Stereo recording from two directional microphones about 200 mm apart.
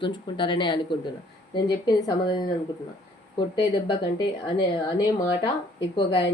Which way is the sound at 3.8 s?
20° left (ahead or behind).